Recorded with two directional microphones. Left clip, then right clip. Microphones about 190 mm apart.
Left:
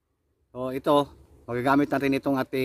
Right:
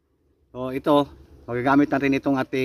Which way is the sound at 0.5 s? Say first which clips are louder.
Right 2 dB; 10° left (ahead or behind).